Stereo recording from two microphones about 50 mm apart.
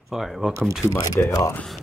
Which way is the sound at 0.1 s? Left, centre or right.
Centre.